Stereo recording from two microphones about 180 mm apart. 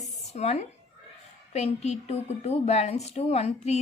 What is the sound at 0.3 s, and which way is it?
Speech, 40° left (ahead or behind).